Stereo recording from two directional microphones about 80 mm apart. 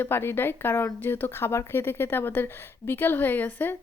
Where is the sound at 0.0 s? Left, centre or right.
Left.